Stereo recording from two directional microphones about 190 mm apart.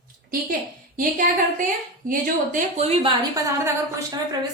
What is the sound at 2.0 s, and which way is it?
Speech, 45° right (ahead or behind).